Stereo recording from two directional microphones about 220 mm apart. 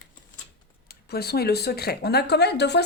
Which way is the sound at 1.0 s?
45° left (ahead or behind).